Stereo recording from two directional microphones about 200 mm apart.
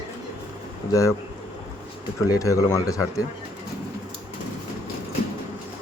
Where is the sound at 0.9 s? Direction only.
15° left (ahead or behind).